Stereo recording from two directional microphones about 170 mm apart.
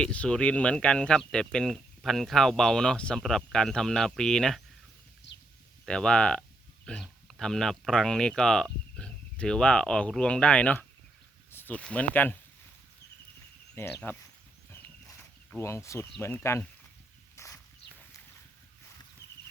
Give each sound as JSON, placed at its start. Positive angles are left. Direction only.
{"t": 0.0, "sound": "speech", "side_deg": 5}
{"t": 5.3, "sound": "a sound", "side_deg": 90}
{"t": 5.8, "sound": "speech", "side_deg": 5}
{"t": 13.7, "sound": "speech", "side_deg": 10}
{"t": 15.4, "sound": "speech", "side_deg": 15}
{"t": 17.3, "sound": "walk", "side_deg": 20}